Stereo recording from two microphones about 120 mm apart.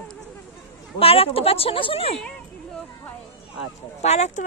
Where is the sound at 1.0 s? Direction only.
55° left (ahead or behind).